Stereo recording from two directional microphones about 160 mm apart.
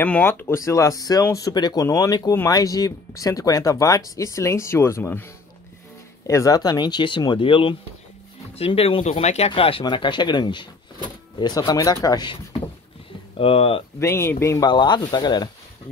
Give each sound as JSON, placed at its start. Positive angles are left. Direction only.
{"t": 0.0, "sound": "speech", "side_deg": 10}
{"t": 13.4, "sound": "speech", "side_deg": 35}
{"t": 13.9, "sound": "speech", "side_deg": 15}